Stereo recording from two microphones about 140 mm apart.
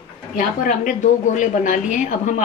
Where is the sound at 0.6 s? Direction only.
70° left (ahead or behind).